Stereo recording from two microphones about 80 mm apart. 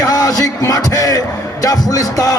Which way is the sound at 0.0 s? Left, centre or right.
Left.